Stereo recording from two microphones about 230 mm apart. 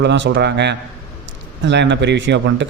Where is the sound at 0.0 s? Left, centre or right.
Right.